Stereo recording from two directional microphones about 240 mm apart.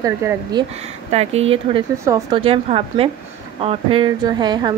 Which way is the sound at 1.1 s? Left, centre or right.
Right.